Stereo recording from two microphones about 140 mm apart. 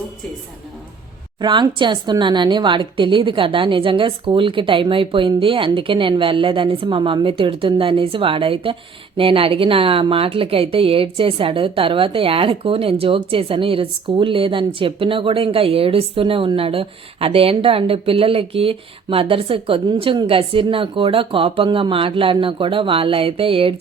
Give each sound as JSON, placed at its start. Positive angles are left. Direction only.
{"t": 1.4, "sound": "a woman's voice", "side_deg": -30}